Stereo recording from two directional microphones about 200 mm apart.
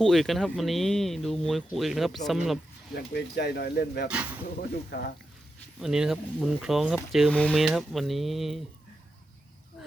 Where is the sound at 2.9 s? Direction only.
55° left (ahead or behind).